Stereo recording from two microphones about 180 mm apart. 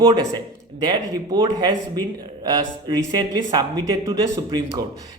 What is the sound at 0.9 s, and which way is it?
Speech, 20° right (ahead or behind).